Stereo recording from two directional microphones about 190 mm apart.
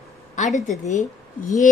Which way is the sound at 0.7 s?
40° left (ahead or behind).